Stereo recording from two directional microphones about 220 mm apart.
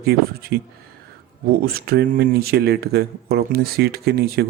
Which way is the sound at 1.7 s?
45° right (ahead or behind).